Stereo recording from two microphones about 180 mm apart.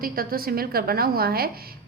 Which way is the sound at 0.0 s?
55° right (ahead or behind).